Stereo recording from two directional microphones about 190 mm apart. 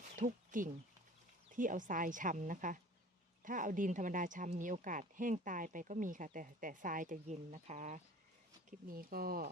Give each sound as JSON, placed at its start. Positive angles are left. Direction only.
{"t": 0.2, "sound": "speech", "side_deg": -45}
{"t": 8.9, "sound": "speech", "side_deg": -50}